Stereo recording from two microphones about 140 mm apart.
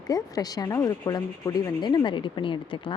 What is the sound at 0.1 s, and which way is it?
Speech, 25° left (ahead or behind).